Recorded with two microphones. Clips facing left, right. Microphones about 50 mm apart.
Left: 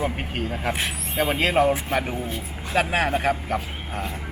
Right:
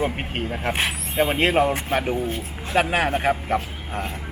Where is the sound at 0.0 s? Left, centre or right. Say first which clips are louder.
Right 2 dB; centre.